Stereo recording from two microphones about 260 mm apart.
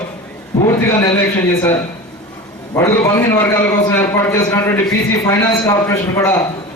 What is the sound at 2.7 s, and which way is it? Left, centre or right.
A man's voice, centre.